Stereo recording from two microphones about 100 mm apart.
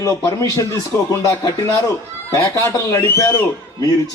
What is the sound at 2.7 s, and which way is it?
Speech, 25° left (ahead or behind).